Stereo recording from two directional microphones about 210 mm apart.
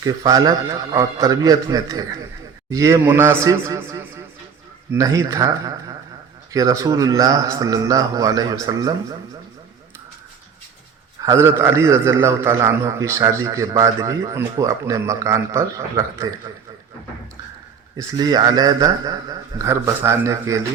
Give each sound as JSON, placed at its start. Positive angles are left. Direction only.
{"t": 0.0, "sound": "a man's voice", "side_deg": -15}
{"t": 11.2, "sound": "a man's voice", "side_deg": -15}
{"t": 17.9, "sound": "a man's voice", "side_deg": -20}